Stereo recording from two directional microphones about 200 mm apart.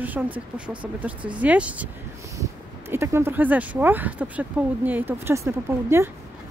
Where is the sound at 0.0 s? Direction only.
10° right (ahead or behind).